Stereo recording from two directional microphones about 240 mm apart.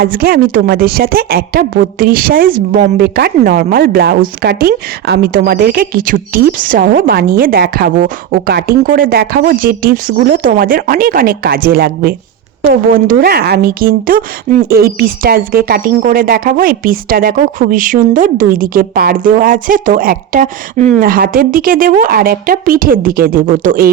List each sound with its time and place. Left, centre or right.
0.0 s a woman's voice: right